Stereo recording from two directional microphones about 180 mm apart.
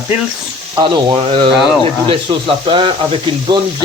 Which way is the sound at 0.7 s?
25° right (ahead or behind).